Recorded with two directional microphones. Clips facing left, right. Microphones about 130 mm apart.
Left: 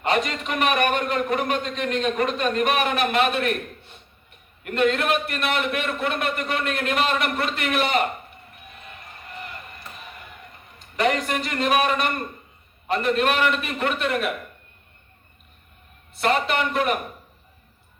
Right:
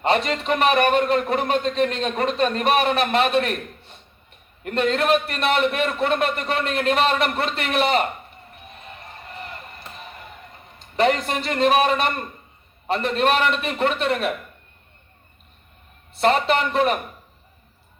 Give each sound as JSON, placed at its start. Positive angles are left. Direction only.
{"t": 0.0, "sound": "a man's voice", "side_deg": -35}
{"t": 8.7, "sound": "a sound", "side_deg": -30}
{"t": 10.9, "sound": "a man's voice", "side_deg": -30}
{"t": 16.1, "sound": "a man's voice", "side_deg": -30}